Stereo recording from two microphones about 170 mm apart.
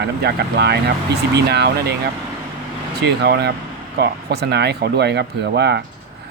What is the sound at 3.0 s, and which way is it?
Speech, 75° right (ahead or behind).